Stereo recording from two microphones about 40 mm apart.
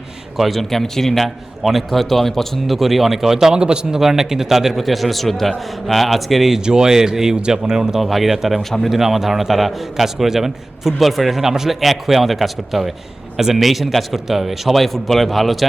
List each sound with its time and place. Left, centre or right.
0.3 s a man's voice: centre
0.7 s a man's voice: centre
3.3 s a man's voice: right
4.0 s a man's voice: centre
6.7 s speech: centre
7.9 s a man's voice: centre